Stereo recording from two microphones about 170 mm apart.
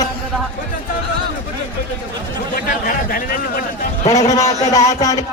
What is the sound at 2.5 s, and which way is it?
A man's voice, 55° left (ahead or behind).